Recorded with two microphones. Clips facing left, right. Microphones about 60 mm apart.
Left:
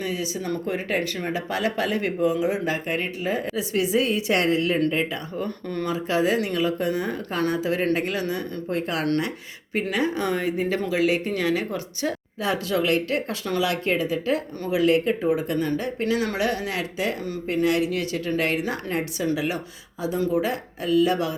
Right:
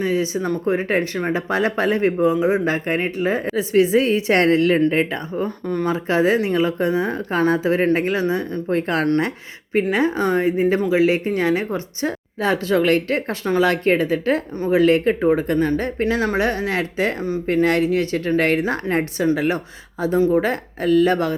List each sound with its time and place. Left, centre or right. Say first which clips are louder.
0.0 s speech: right 7 dB; right
4.4 s speech: right 6 dB; right
4.9 s speech: right 5 dB; right
5.4 s speech: right 6 dB; centre
5.9 s speech: right 4 dB; right